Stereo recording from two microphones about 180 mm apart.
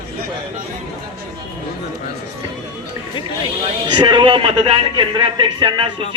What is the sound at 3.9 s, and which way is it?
A man's voice, 25° right (ahead or behind).